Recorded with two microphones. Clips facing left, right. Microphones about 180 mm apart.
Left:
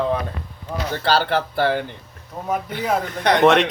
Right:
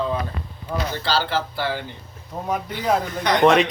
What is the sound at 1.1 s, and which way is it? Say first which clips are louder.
Speech: left 5 dB; 55° left (ahead or behind).